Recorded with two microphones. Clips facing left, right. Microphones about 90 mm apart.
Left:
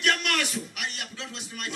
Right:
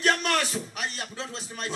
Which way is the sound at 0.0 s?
35° right (ahead or behind).